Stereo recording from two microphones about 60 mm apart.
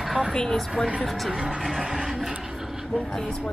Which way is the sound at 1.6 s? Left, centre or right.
Centre.